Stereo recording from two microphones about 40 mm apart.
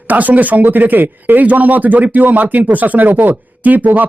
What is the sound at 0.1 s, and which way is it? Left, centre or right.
Speech, right.